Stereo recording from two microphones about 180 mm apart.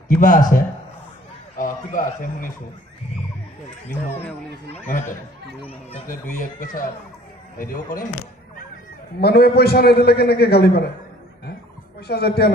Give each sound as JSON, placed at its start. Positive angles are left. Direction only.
{"t": 0.1, "sound": "a man's voice", "side_deg": 50}
{"t": 1.6, "sound": "a man's voice", "side_deg": 45}
{"t": 6.0, "sound": "a man's voice", "side_deg": 50}
{"t": 9.2, "sound": "a man's voice", "side_deg": 60}
{"t": 12.1, "sound": "a man's voice", "side_deg": 65}